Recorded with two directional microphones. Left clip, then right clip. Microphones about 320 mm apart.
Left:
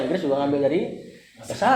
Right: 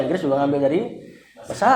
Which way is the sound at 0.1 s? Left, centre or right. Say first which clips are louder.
Right 2 dB; right.